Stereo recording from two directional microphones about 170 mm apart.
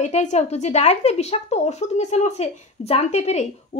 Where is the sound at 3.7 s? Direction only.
35° left (ahead or behind).